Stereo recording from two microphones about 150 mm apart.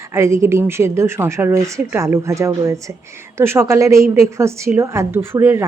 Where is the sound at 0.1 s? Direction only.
20° right (ahead or behind).